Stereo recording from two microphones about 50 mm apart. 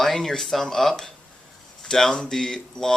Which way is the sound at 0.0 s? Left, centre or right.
Centre.